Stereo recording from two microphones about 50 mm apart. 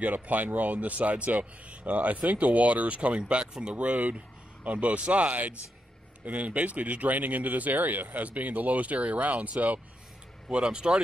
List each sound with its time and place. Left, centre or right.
0.0 s a man's voice: right
10.5 s a man's voice: centre